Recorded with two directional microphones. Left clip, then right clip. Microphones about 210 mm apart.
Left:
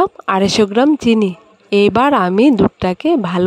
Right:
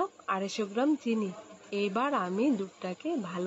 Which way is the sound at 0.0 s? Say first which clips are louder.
Left 17 dB; 55° left (ahead or behind).